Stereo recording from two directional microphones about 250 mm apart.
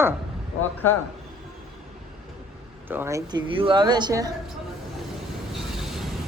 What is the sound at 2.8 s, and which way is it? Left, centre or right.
A woman's voice, centre.